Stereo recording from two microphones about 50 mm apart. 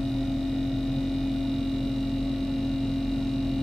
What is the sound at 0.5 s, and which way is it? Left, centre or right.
Hum, centre.